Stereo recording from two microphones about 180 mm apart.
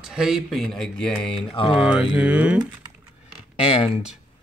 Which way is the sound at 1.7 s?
5° right (ahead or behind).